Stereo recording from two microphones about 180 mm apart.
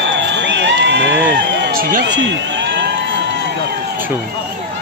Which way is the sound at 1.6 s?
55° right (ahead or behind).